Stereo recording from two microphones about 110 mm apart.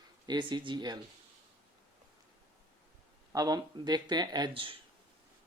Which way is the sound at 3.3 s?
35° right (ahead or behind).